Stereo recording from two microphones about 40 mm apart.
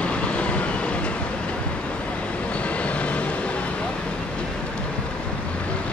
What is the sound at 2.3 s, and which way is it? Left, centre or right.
Vehicle, left.